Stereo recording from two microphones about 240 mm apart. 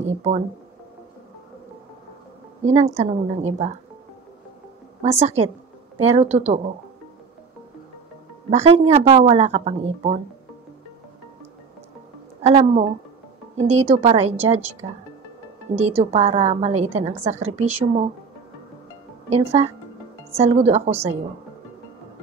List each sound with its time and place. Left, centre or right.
0.0 s a sound: right
2.6 s speech: right
5.0 s speech: right
8.5 s speech: right
12.4 s a woman's voice: right
19.2 s speech: right